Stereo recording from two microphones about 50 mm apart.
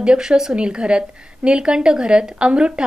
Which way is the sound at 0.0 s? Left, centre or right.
Centre.